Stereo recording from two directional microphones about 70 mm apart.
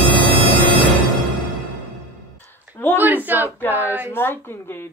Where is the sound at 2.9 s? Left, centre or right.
Right.